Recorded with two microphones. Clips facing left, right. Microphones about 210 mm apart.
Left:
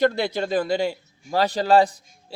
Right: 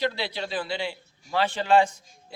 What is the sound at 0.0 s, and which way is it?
A man's voice, 45° left (ahead or behind).